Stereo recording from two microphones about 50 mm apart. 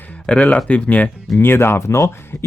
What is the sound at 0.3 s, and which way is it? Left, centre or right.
Speech, left.